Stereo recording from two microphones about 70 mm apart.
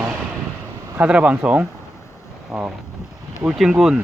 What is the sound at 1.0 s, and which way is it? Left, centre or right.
Speech, centre.